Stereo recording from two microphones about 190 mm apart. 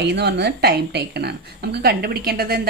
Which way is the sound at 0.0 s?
65° right (ahead or behind).